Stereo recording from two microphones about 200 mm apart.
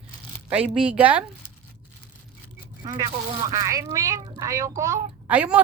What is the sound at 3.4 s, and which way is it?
A woman's voice, 15° right (ahead or behind).